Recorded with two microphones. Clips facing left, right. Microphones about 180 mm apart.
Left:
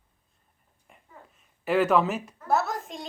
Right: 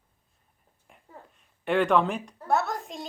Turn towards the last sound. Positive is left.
turn(degrees=0)  # may be behind; listen again after turning